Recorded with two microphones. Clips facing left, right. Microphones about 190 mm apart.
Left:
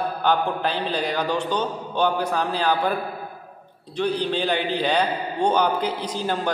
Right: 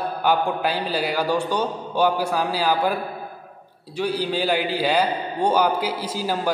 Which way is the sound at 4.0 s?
10° right (ahead or behind).